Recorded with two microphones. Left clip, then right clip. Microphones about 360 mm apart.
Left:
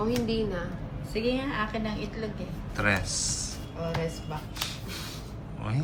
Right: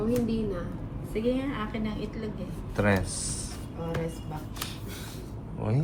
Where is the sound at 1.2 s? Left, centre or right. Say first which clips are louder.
Left 1 dB; left.